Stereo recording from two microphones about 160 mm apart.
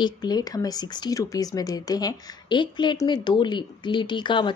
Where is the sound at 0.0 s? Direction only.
25° left (ahead or behind).